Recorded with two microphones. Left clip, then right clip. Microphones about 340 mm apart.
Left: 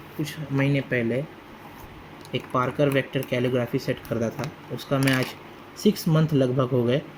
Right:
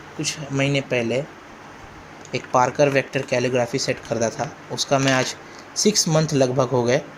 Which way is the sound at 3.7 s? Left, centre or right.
Right.